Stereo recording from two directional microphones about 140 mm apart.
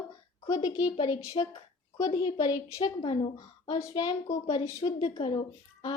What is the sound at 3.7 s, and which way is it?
Speech, 30° left (ahead or behind).